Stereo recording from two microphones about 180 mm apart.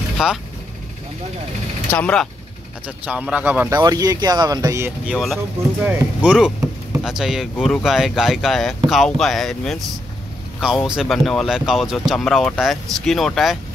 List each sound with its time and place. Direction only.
0.2 s speech: 5° right (ahead or behind)
1.9 s speech: 5° left (ahead or behind)
3.1 s speech: 5° right (ahead or behind)
5.1 s speech: centre (ahead or behind)
10.9 s speech: centre (ahead or behind)